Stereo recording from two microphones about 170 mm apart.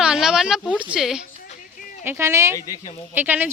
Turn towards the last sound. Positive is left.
turn(degrees=-10)  # may be behind; listen again after turning